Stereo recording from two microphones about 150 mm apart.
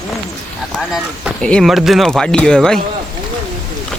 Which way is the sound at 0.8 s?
5° right (ahead or behind).